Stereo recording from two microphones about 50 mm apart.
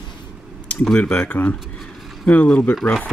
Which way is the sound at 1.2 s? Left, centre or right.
Left.